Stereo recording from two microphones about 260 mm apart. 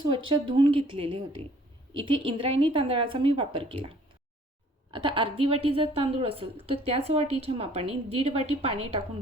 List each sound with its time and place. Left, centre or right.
0.3 s a woman's voice: centre